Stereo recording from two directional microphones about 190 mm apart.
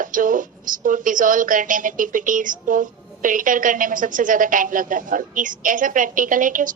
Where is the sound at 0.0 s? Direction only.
45° right (ahead or behind).